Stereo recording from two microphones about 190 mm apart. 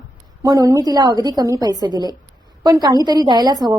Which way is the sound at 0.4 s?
20° right (ahead or behind).